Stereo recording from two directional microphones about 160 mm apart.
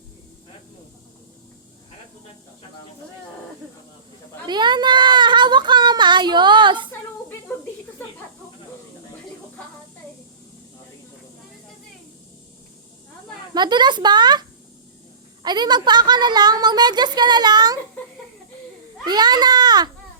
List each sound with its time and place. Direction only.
4.4 s a sound: 30° right (ahead or behind)
13.5 s speech: 25° right (ahead or behind)
15.4 s speech: 25° right (ahead or behind)
19.0 s speech: 25° right (ahead or behind)